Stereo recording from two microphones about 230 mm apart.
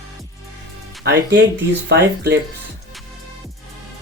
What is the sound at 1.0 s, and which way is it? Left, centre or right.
Speech, right.